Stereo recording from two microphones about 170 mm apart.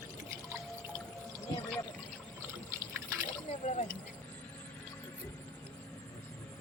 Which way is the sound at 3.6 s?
50° left (ahead or behind).